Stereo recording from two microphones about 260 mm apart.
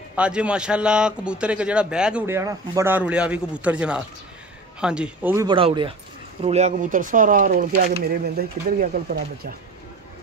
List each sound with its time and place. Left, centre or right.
0.1 s a man's voice: centre; by 9.6 s right